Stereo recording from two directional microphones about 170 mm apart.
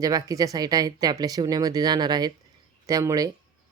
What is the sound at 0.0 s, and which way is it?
Speech, 20° right (ahead or behind).